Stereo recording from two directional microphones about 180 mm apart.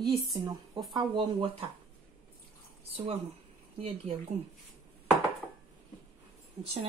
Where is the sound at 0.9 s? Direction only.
25° right (ahead or behind).